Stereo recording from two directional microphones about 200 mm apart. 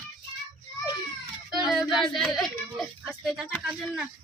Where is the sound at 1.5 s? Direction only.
Centre (ahead or behind).